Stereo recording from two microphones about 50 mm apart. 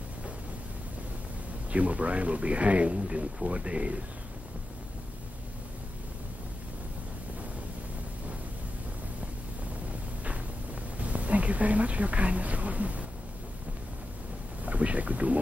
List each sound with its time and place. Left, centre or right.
1.7 s speech: right
10.2 s a sound: right
14.6 s speech: right